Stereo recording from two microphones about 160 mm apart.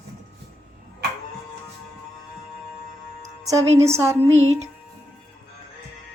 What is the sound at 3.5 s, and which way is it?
Speech, 20° right (ahead or behind).